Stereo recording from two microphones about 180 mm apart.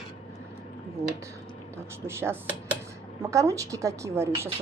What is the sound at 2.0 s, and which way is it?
Speech, 15° right (ahead or behind).